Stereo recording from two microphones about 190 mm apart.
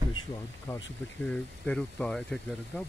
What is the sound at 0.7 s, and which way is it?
Speech, 15° left (ahead or behind).